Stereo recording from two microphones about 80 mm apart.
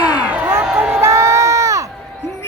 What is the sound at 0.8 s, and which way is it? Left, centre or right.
Crowd, right.